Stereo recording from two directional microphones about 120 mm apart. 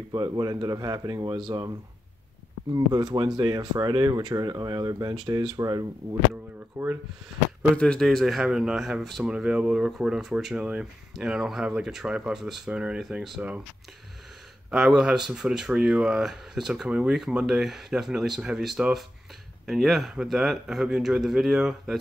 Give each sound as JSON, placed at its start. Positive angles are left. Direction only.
{"t": 0.1, "sound": "speech", "side_deg": -35}
{"t": 2.7, "sound": "speech", "side_deg": -30}
{"t": 6.8, "sound": "speech", "side_deg": -15}
{"t": 7.7, "sound": "speech", "side_deg": 10}
{"t": 14.7, "sound": "speech", "side_deg": -5}